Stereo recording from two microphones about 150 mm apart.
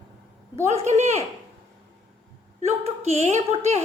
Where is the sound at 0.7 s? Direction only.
50° right (ahead or behind).